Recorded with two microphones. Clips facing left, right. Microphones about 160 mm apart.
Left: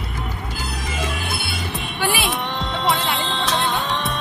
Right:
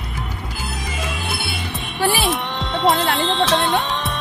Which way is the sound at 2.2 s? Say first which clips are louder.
Right 2 dB; centre (ahead or behind).